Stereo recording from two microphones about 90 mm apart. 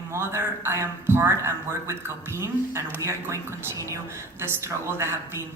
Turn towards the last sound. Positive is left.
turn(degrees=-30)  # may be behind; listen again after turning